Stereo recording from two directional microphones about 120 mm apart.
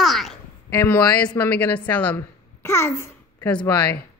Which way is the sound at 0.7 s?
25° left (ahead or behind).